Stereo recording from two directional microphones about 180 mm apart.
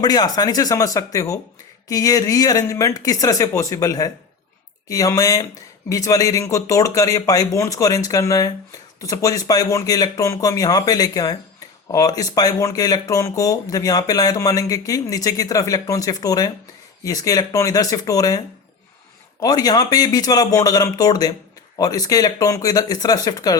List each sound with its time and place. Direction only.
0.0 s speech: 20° left (ahead or behind)